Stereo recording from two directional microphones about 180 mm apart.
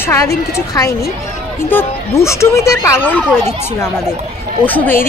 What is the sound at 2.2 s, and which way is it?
Speech, 15° left (ahead or behind).